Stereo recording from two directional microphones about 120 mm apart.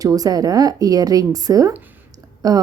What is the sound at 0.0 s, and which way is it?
A woman's voice, 30° right (ahead or behind).